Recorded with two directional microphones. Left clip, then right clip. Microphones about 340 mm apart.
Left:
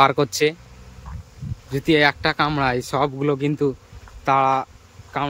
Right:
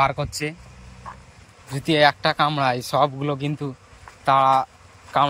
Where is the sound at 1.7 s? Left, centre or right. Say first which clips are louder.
Even; centre.